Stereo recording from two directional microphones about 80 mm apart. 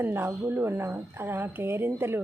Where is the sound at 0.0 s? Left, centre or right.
Right.